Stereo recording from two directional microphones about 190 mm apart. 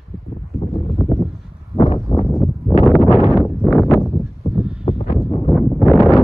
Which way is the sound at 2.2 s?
Centre (ahead or behind).